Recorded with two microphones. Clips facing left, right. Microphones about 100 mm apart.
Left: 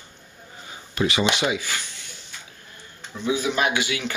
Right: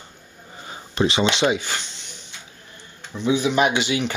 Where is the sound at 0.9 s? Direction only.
25° right (ahead or behind).